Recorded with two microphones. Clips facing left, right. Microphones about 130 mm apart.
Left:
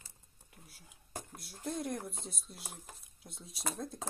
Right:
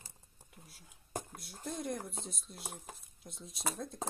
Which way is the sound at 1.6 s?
Centre (ahead or behind).